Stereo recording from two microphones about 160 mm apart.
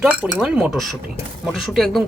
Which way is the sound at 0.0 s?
5° right (ahead or behind).